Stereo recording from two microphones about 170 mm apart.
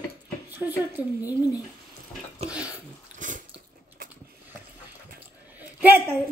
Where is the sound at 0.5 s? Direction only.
10° right (ahead or behind).